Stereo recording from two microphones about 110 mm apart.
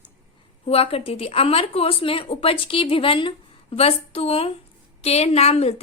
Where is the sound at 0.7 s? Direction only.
60° left (ahead or behind).